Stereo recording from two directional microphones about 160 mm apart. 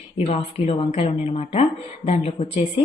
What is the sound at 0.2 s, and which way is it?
Speech, 40° left (ahead or behind).